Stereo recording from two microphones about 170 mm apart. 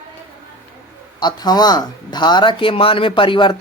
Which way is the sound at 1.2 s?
25° left (ahead or behind).